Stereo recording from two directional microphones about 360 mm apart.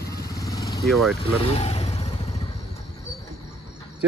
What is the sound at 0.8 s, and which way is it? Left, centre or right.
Speech, centre.